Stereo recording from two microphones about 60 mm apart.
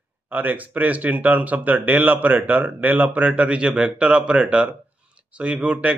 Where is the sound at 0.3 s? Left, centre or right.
Right.